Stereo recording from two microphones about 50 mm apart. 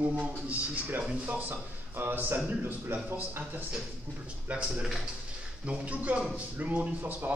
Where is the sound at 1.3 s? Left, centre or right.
Right.